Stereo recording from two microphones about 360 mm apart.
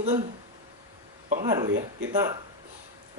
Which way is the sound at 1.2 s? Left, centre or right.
Centre.